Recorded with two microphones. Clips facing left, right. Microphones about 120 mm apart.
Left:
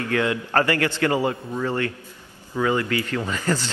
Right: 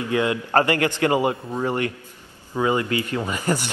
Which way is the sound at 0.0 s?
20° right (ahead or behind).